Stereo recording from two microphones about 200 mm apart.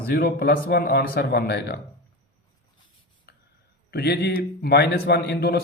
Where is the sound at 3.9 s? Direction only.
55° left (ahead or behind).